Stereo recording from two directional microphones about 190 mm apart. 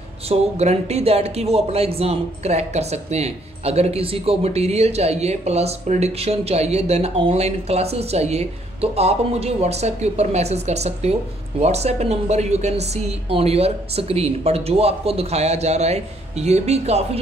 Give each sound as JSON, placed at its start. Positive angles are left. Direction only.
{"t": 0.3, "sound": "speech", "side_deg": -35}